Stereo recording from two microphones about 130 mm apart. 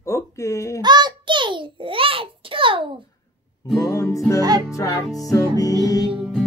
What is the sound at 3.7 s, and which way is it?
Music, 25° left (ahead or behind).